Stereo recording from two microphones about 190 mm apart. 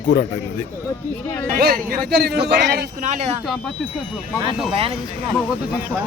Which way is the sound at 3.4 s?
5° left (ahead or behind).